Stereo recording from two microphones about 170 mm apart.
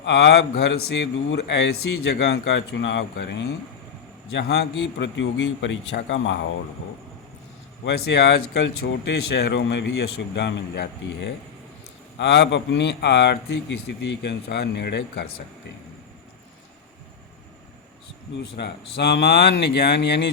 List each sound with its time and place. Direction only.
0.0 s a man's voice: 80° left
4.4 s speech: 75° left (ahead or behind)
4.7 s a man's voice: 90° left
7.9 s a man's voice: 85° left
18.5 s speech: 75° left (ahead or behind)